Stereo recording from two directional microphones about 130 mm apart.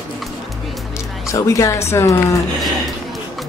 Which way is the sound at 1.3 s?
25° left (ahead or behind).